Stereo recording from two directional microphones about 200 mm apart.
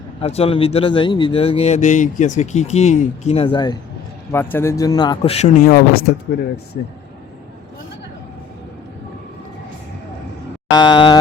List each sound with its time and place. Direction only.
0.2 s a man's voice: 30° left (ahead or behind)
4.3 s a man's voice: 10° left (ahead or behind); by 5.8 s 40° left (ahead or behind)
10.8 s a man's voice: 25° left (ahead or behind)